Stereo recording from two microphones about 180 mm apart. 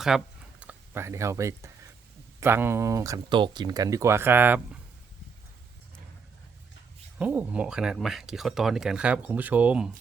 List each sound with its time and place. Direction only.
0.1 s speech: centre (ahead or behind)
7.2 s speech: 10° right (ahead or behind)